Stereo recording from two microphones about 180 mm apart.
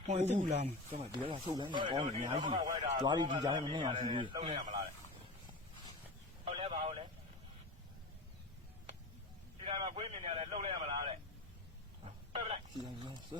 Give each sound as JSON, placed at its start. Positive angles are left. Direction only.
{"t": 0.0, "sound": "a man's voice", "side_deg": -35}
{"t": 2.0, "sound": "speech", "side_deg": -40}
{"t": 3.0, "sound": "a man's voice", "side_deg": -25}
{"t": 6.4, "sound": "a sound", "side_deg": -30}
{"t": 9.6, "sound": "speech", "side_deg": -30}
{"t": 12.0, "sound": "a sound", "side_deg": -35}
{"t": 12.8, "sound": "a man's voice", "side_deg": -25}